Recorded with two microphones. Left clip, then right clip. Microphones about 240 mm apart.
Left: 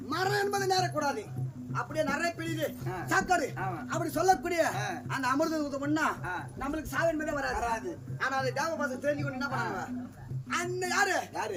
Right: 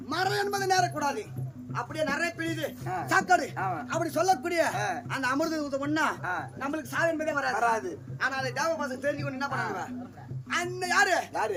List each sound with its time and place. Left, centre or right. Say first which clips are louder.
0.1 s a man's voice: right 1 dB; centre
4.7 s a man's voice: right 4 dB; centre
5.1 s a man's voice: left 1 dB; centre
7.5 s a man's voice: right 8 dB; centre
8.2 s a man's voice: right 1 dB; centre